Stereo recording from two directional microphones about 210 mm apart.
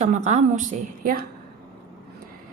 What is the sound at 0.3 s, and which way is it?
Speech, 35° right (ahead or behind).